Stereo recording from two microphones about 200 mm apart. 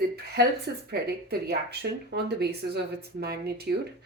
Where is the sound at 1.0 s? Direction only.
50° right (ahead or behind).